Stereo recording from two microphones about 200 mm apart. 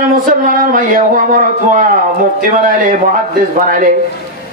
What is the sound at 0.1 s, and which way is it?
Speech, 45° right (ahead or behind).